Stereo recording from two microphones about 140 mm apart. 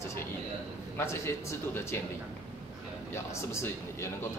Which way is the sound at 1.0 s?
20° left (ahead or behind).